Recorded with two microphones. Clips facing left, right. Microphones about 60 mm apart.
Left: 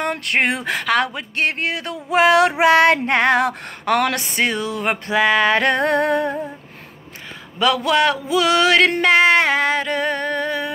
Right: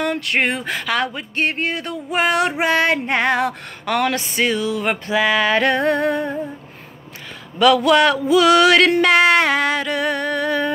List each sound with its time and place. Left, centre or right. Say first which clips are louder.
0.0 s female singing: even; left
2.6 s female singing: left 4 dB; left
7.5 s music: right 4 dB; centre